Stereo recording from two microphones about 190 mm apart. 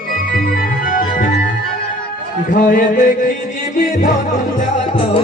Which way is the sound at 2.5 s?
45° left (ahead or behind).